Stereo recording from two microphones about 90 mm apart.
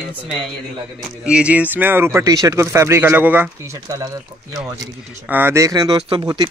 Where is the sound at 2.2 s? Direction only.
40° right (ahead or behind); by 3.4 s 20° right (ahead or behind).